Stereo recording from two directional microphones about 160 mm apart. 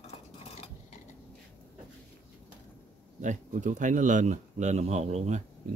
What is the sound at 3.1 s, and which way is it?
Speech, 50° right (ahead or behind).